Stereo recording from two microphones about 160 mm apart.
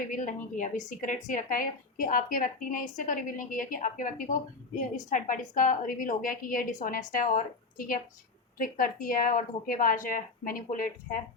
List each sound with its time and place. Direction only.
0.0 s a woman's voice: 55° left (ahead or behind)